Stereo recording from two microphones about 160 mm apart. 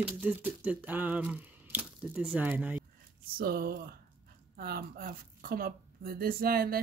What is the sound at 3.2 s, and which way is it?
A woman's voice, 65° right (ahead or behind).